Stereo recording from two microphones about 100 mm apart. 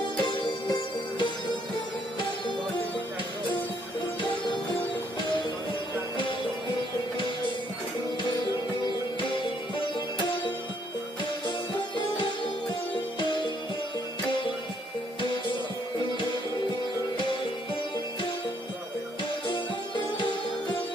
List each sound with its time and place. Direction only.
0.2 s music: 60° left (ahead or behind)
4.2 s music: 55° left (ahead or behind)
8.8 s music: 55° left (ahead or behind)
9.9 s sitar: 50° left (ahead or behind)
11.4 s music: 55° left (ahead or behind)